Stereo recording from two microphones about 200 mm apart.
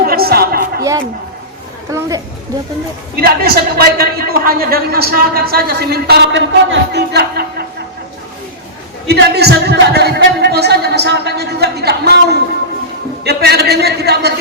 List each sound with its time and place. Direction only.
0.0 s music: 50° right (ahead or behind)
1.9 s speech: 15° right (ahead or behind)
3.2 s a man's voice: 50° right (ahead or behind)
9.0 s a man's voice: 55° right (ahead or behind)